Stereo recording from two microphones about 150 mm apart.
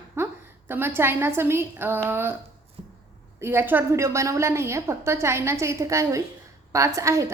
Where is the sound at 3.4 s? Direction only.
15° right (ahead or behind).